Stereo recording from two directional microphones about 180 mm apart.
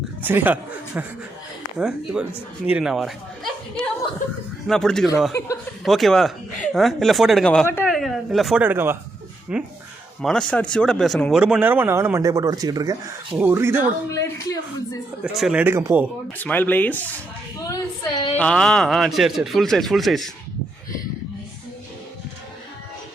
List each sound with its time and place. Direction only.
0.2 s speech: 10° right (ahead or behind)
14.1 s speech: 15° left (ahead or behind)
15.2 s speech: centre (ahead or behind)
16.4 s speech: 10° left (ahead or behind)
17.7 s a sound: 20° left (ahead or behind)
18.3 s speech: 5° left (ahead or behind)